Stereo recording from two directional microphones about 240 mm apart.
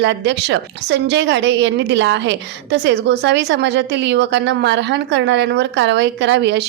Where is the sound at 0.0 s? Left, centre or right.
Right.